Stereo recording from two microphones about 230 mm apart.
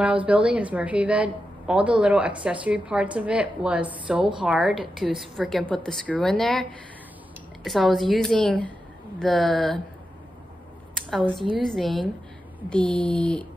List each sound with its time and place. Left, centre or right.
0.0 s a woman's voice: centre
11.0 s a woman's voice: centre